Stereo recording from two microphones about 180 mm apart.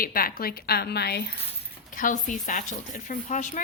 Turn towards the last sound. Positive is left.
turn(degrees=45)  # may be behind; listen again after turning